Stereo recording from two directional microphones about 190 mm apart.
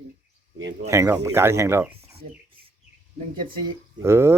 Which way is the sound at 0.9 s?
15° right (ahead or behind).